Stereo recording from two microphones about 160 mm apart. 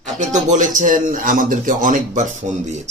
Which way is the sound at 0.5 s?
55° right (ahead or behind).